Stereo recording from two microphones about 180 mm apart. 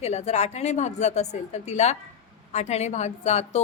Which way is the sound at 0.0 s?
35° left (ahead or behind).